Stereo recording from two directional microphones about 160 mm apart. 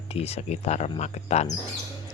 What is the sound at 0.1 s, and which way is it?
Speech, 40° left (ahead or behind).